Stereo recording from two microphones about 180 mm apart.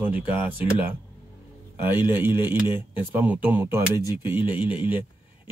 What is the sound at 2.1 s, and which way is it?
Speech, 10° right (ahead or behind).